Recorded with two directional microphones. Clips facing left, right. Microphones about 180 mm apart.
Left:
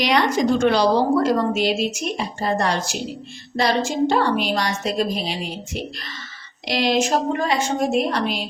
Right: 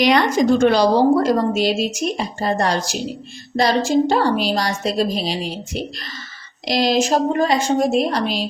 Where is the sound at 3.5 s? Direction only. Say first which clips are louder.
Right 4 dB; 35° right (ahead or behind).